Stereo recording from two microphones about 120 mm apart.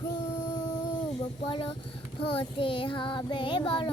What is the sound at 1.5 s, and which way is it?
Child singing, 45° left (ahead or behind).